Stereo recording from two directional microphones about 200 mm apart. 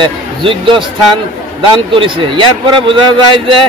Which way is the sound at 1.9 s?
25° right (ahead or behind).